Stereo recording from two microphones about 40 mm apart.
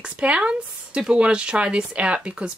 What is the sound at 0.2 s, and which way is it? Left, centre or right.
Speech, right.